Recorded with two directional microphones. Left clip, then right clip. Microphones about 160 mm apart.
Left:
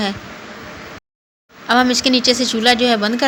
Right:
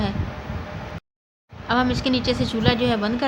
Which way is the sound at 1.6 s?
20° left (ahead or behind).